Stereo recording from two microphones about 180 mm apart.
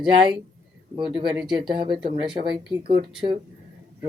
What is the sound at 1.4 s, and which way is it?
Speech, 25° right (ahead or behind).